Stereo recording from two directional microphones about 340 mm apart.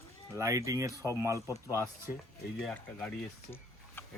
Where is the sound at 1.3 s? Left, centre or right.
Centre.